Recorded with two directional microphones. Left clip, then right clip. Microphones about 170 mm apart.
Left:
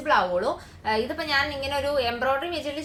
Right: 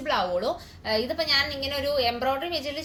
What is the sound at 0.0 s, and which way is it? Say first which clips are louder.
A woman's voice: left 3 dB; 5° left (ahead or behind).